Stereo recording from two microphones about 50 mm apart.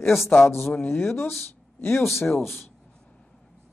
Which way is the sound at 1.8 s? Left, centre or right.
Left.